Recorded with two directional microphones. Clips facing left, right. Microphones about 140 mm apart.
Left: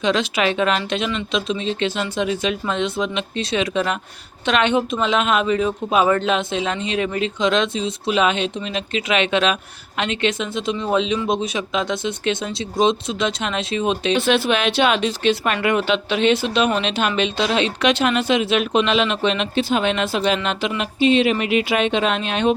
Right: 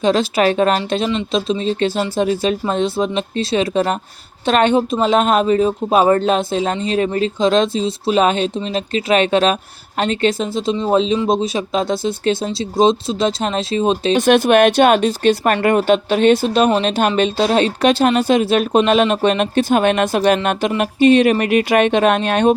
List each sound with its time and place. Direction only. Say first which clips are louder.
0.0 s speech: right 5 dB; 40° right (ahead or behind)